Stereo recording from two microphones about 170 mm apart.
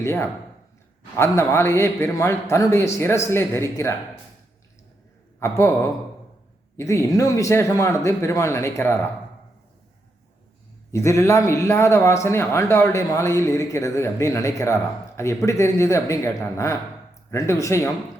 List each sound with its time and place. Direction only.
0.0 s a man's voice: 15° left (ahead or behind)
5.4 s speech: 15° left (ahead or behind)
6.7 s a man's voice: 15° left (ahead or behind)
10.9 s a man's voice: 15° left (ahead or behind)